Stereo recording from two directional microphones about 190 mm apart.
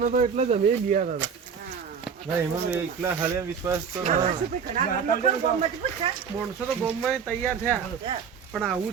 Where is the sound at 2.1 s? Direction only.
5° right (ahead or behind).